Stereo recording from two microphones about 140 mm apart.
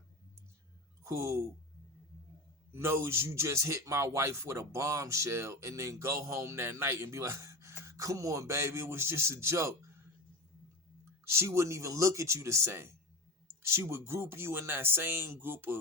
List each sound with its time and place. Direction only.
1.0 s speech: 20° right (ahead or behind)
2.7 s speech: 20° right (ahead or behind)
11.3 s speech: 20° right (ahead or behind)